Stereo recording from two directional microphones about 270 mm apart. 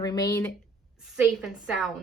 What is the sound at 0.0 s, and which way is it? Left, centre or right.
Speech, centre.